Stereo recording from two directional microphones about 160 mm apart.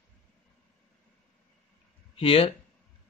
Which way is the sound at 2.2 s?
40° left (ahead or behind).